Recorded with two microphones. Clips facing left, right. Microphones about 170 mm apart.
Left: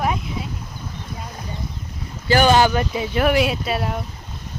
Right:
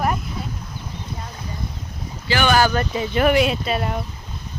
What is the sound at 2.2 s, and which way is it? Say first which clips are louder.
Speech: left 5 dB; 40° left (ahead or behind).